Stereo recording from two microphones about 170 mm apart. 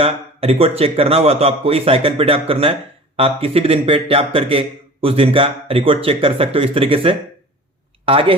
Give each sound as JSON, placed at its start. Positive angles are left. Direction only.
{"t": 0.0, "sound": "speech", "side_deg": -35}